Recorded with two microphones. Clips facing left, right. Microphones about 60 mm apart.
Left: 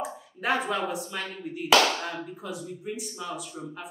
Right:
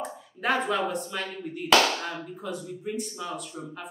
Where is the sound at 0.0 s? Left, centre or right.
Centre.